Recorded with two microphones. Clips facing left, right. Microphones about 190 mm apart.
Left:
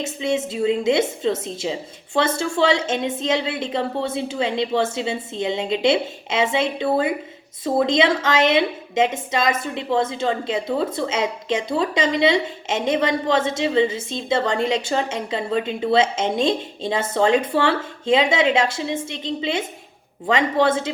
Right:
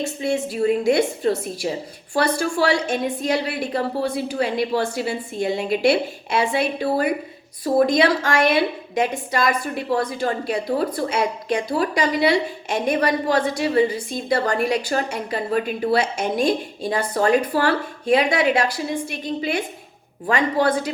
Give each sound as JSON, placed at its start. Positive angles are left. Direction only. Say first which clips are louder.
{"t": 0.0, "sound": "a woman's voice", "louder": "even", "side_deg": 20}